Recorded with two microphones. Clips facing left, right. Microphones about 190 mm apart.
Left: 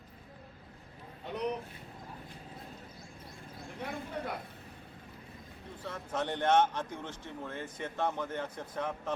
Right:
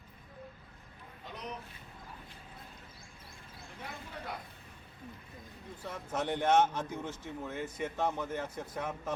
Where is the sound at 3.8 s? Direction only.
55° left (ahead or behind).